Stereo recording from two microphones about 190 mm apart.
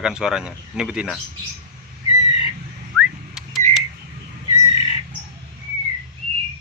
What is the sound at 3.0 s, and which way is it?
Whistling, 5° right (ahead or behind).